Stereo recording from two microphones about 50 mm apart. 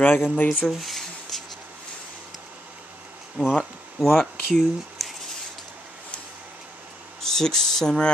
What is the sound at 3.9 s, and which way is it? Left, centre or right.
Speech, centre.